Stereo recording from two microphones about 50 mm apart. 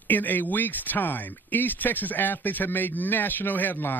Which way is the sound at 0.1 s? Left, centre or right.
Left.